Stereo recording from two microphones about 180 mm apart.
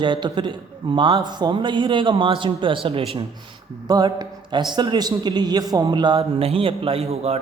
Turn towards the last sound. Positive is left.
turn(degrees=-35)  # may be behind; listen again after turning